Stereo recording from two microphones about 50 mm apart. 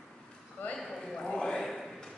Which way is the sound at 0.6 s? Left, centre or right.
Left.